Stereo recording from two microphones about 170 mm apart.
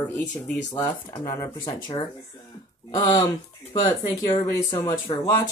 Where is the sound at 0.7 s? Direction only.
20° left (ahead or behind).